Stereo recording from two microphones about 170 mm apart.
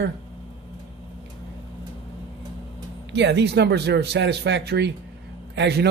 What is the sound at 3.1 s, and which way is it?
Speech, 90° right.